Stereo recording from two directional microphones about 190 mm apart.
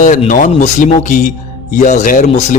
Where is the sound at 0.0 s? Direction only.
40° left (ahead or behind).